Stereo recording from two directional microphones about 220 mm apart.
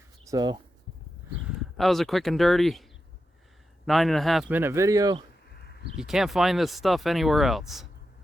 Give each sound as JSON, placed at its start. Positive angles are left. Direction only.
{"t": 0.3, "sound": "speech", "side_deg": -20}
{"t": 1.5, "sound": "speech", "side_deg": 0}
{"t": 3.8, "sound": "a man's voice", "side_deg": 0}
{"t": 5.5, "sound": "a sound", "side_deg": 45}
{"t": 6.0, "sound": "speech", "side_deg": 0}